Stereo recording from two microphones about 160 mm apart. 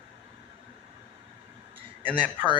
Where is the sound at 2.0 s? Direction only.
5° left (ahead or behind).